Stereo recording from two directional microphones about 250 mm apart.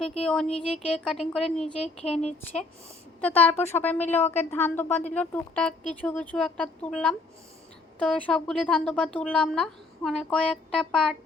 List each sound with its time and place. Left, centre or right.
0.2 s a woman's voice: centre